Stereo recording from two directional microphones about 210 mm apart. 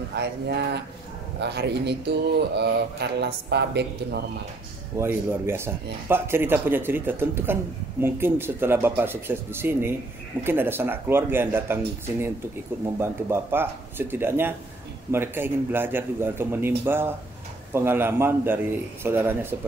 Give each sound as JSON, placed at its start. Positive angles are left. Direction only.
{"t": 0.1, "sound": "speech", "side_deg": -50}
{"t": 4.9, "sound": "speech", "side_deg": -10}
{"t": 12.8, "sound": "speech", "side_deg": -10}